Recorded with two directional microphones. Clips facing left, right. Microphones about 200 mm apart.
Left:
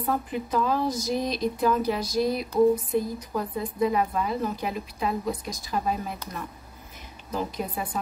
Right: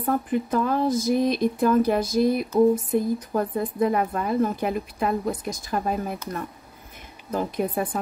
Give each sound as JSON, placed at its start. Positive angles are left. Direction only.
{"t": 0.3, "sound": "a woman's voice", "side_deg": -50}